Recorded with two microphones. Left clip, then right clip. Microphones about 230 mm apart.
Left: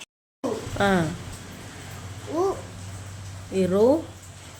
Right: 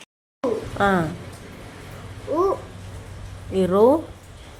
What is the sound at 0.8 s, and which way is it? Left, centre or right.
Speech, centre.